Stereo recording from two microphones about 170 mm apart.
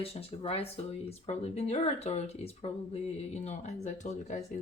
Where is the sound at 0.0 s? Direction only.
35° left (ahead or behind).